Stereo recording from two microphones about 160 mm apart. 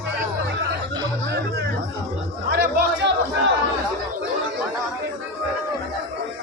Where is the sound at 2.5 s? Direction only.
90° right.